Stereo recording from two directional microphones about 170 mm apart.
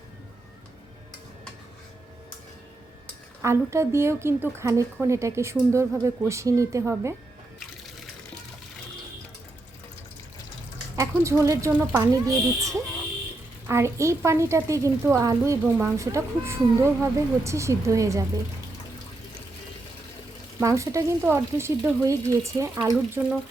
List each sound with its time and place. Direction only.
3.4 s a woman's voice: 15° right (ahead or behind)
10.9 s a woman's voice: 15° right (ahead or behind)
20.6 s a woman's voice: 20° right (ahead or behind)